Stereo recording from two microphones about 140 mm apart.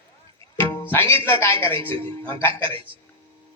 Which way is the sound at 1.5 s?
40° right (ahead or behind).